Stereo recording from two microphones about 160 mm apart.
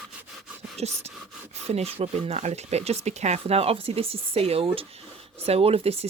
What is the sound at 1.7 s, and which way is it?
Speech, 40° right (ahead or behind).